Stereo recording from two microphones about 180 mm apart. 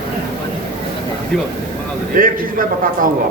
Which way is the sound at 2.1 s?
50° right (ahead or behind).